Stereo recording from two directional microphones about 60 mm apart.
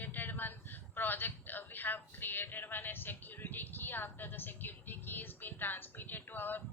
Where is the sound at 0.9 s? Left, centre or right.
Left.